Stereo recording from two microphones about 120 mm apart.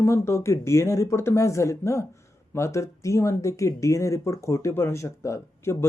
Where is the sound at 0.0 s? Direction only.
20° left (ahead or behind).